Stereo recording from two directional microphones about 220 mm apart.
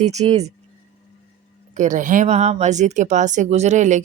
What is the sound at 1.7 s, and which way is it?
A woman's voice, 35° right (ahead or behind).